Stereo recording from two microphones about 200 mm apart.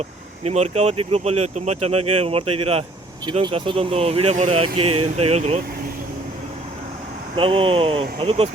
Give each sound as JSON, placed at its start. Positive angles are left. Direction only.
{"t": 0.4, "sound": "speech", "side_deg": -35}
{"t": 7.3, "sound": "speech", "side_deg": -25}